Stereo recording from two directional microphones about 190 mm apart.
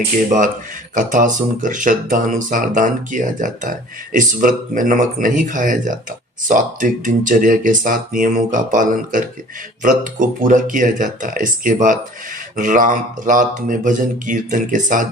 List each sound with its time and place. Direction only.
0.3 s speech: 40° right (ahead or behind)